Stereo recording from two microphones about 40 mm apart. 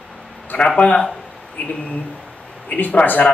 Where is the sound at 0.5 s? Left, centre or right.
Left.